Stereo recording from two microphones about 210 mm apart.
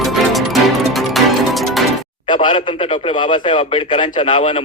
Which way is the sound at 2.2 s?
25° left (ahead or behind).